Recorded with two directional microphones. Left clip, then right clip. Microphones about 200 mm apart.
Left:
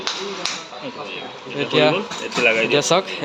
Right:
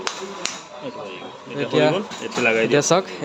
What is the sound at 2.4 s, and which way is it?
Speech, 50° right (ahead or behind).